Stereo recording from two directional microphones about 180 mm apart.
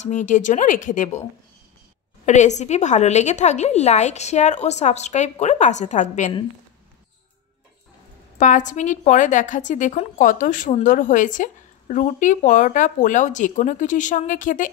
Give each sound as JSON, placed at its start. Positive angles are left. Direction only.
{"t": 0.0, "sound": "a woman's voice", "side_deg": 45}
{"t": 2.2, "sound": "a woman's voice", "side_deg": 40}
{"t": 8.4, "sound": "a woman's voice", "side_deg": 45}